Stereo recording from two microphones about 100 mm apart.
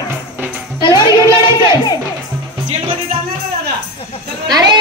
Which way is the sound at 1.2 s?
30° right (ahead or behind).